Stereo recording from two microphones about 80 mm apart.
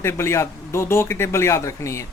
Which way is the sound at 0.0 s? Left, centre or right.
Left.